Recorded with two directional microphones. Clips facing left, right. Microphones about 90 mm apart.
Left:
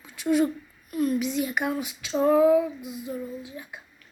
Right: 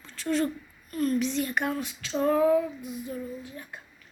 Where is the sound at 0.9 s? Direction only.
5° left (ahead or behind).